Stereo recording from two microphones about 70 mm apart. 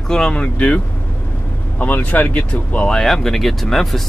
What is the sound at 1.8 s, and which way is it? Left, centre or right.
Speech, left.